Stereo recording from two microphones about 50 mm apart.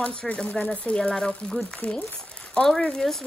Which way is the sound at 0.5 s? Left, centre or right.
Left.